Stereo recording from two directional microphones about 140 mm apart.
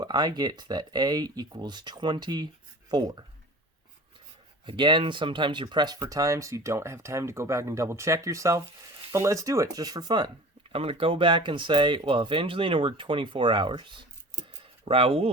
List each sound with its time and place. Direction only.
0.0 s speech: 30° right (ahead or behind)
4.6 s speech: 35° right (ahead or behind)